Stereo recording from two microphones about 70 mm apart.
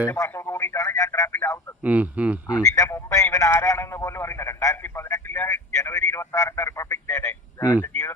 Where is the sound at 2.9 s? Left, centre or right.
Left.